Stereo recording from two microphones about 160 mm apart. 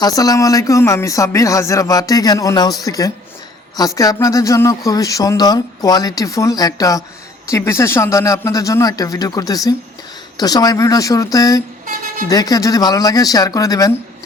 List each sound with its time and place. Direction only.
0.0 s speech: 20° left (ahead or behind)